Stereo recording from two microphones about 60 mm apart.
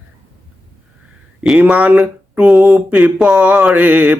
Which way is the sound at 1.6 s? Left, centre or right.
Right.